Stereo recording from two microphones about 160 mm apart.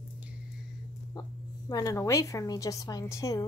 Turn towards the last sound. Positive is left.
turn(degrees=20)  # may be behind; listen again after turning